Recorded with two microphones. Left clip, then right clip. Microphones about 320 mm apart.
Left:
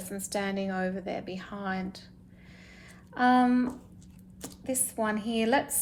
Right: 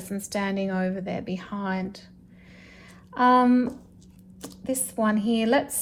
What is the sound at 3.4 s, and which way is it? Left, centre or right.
A woman's voice, centre.